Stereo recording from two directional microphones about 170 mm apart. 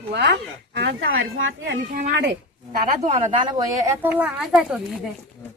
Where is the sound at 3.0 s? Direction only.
40° right (ahead or behind).